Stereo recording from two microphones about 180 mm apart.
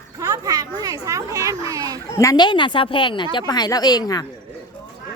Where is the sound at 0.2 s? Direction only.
20° right (ahead or behind).